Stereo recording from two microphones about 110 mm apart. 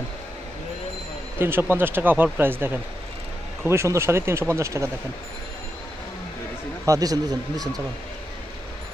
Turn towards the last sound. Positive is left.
turn(degrees=-35)  # may be behind; listen again after turning